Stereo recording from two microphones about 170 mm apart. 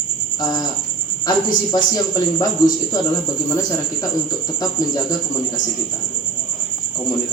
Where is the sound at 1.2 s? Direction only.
25° left (ahead or behind).